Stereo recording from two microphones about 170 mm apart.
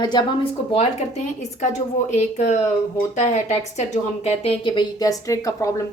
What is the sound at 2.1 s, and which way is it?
A woman's voice, 40° left (ahead or behind).